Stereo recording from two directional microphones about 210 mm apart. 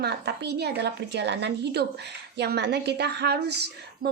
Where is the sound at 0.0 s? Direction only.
55° right (ahead or behind).